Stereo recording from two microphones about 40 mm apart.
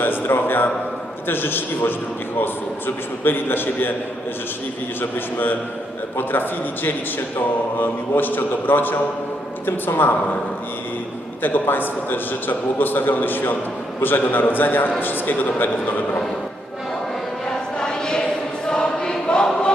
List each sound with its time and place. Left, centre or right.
0.0 s a sound: left
1.3 s a man's voice: left
4.9 s a man's voice: left
11.4 s a man's voice: left
17.5 s choir: centre